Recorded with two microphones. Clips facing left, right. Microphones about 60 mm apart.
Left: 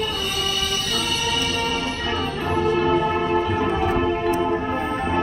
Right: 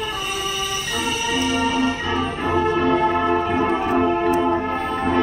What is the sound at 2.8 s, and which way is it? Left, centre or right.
Music, right.